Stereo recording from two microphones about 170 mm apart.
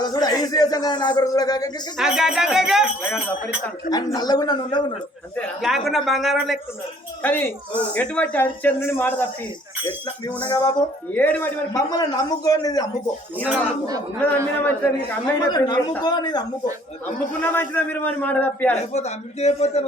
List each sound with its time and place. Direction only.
0.0 s a man's voice: 20° left (ahead or behind)
2.0 s speech: 5° right (ahead or behind)
3.8 s a man's voice: 25° left (ahead or behind)
5.6 s speech: centre (ahead or behind)
7.2 s a man's voice: 10° left (ahead or behind)
10.5 s a man's voice: 20° left (ahead or behind)
11.1 s a man's voice: 10° left (ahead or behind)
11.7 s a man's voice: 20° left (ahead or behind)
13.3 s a sound: 10° right (ahead or behind)
14.3 s a man's voice: 10° left (ahead or behind)
15.4 s a man's voice: 25° left (ahead or behind)
17.4 s a man's voice: 10° left (ahead or behind)
18.9 s a man's voice: 40° left (ahead or behind)